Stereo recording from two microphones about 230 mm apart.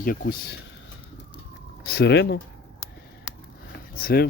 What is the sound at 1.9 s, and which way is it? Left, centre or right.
Speech, left.